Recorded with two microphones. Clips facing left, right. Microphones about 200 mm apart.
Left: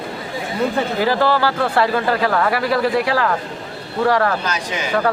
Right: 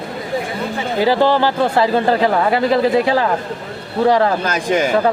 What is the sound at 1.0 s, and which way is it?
A man's voice, 15° right (ahead or behind).